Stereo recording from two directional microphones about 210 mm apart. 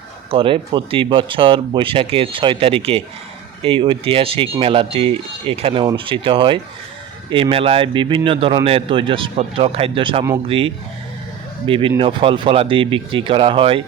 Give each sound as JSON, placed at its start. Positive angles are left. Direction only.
{"t": 0.3, "sound": "speech", "side_deg": -25}